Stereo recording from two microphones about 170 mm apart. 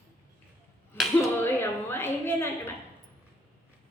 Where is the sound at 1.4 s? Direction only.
15° left (ahead or behind).